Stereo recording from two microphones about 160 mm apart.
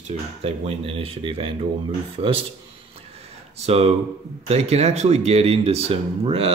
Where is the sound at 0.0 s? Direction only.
40° right (ahead or behind).